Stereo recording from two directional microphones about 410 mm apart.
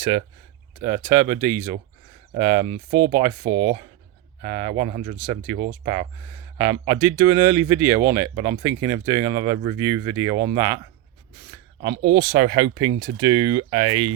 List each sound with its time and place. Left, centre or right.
0.8 s speech: centre
3.4 s speech: right
4.4 s speech: centre
12.1 s speech: centre